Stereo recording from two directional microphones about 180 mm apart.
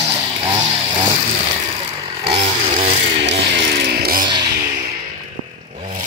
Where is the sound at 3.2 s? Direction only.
70° right (ahead or behind).